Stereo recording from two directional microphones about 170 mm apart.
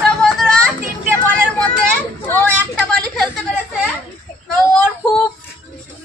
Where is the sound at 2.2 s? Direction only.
10° left (ahead or behind).